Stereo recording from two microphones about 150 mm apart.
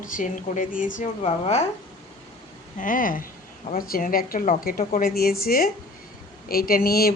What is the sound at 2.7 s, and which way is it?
A woman's voice, 65° left (ahead or behind).